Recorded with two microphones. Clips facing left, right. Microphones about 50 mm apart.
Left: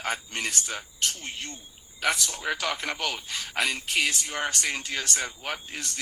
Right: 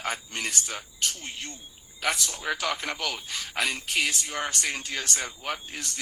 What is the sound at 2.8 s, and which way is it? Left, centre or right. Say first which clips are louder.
A man's voice: left 1 dB; left.